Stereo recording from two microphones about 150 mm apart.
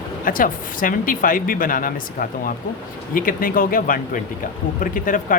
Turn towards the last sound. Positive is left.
turn(degrees=65)  # may be behind; listen again after turning